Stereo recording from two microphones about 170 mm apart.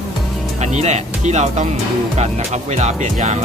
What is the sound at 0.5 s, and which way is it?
Speech, 40° right (ahead or behind).